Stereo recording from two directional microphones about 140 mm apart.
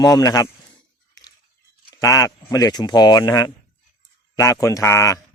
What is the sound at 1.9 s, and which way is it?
Speech, 25° left (ahead or behind).